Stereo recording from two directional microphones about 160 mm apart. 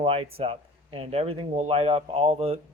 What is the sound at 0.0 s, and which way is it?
Speech, 35° right (ahead or behind).